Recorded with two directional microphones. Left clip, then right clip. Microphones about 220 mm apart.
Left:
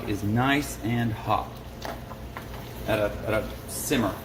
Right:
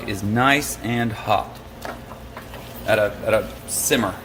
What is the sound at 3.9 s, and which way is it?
Speech, 45° right (ahead or behind).